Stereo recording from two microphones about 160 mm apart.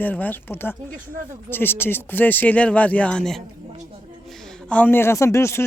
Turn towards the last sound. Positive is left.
turn(degrees=15)  # may be behind; listen again after turning